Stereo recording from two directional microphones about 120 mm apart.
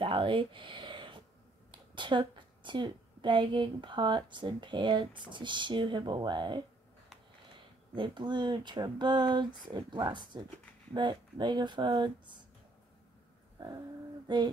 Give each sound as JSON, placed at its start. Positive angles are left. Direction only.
{"t": 0.0, "sound": "a sound", "side_deg": -45}
{"t": 1.7, "sound": "a woman's voice", "side_deg": -40}
{"t": 7.9, "sound": "a woman's voice", "side_deg": -45}
{"t": 13.6, "sound": "a woman's voice", "side_deg": -35}